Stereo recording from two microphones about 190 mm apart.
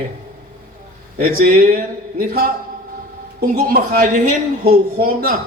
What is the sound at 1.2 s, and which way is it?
Speech, 50° right (ahead or behind).